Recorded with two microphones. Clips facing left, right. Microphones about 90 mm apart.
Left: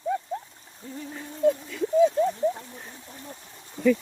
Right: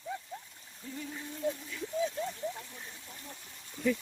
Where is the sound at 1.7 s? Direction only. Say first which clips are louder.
Left 13 dB; 55° left (ahead or behind).